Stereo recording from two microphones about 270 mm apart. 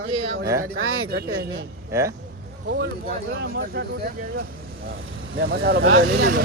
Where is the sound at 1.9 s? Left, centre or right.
Centre.